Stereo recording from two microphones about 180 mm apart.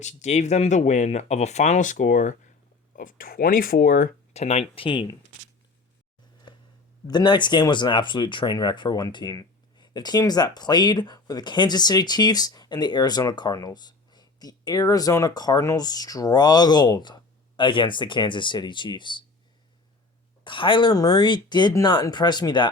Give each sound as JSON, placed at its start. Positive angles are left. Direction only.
{"t": 0.0, "sound": "speech", "side_deg": 40}
{"t": 4.4, "sound": "speech", "side_deg": 35}
{"t": 6.5, "sound": "a sound", "side_deg": 25}
{"t": 7.1, "sound": "speech", "side_deg": 25}
{"t": 20.4, "sound": "speech", "side_deg": 25}